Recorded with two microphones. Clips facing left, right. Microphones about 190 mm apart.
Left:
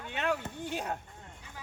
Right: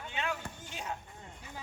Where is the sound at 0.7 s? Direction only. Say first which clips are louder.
Left 5 dB; 60° left (ahead or behind).